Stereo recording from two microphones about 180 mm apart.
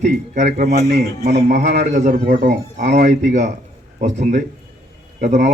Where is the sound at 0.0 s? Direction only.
40° right (ahead or behind).